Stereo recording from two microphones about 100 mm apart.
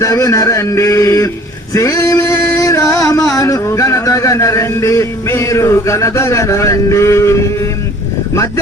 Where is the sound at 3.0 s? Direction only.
30° left (ahead or behind).